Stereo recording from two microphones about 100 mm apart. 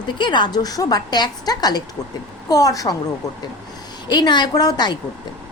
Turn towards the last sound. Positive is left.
turn(degrees=45)  # may be behind; listen again after turning